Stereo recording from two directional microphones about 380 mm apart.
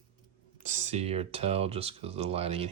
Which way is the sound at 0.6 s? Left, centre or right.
Centre.